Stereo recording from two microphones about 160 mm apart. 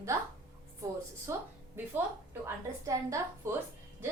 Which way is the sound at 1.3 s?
20° right (ahead or behind).